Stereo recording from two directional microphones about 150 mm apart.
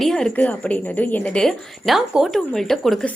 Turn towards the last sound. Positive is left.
turn(degrees=5)  # may be behind; listen again after turning